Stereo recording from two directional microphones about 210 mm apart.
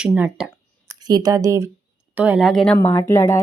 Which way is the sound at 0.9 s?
20° right (ahead or behind).